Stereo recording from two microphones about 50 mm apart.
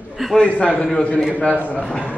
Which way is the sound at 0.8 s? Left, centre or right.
Centre.